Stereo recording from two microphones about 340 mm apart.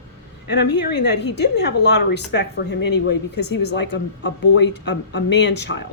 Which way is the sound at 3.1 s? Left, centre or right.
Left.